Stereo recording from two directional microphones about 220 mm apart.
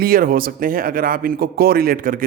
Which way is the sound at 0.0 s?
40° right (ahead or behind).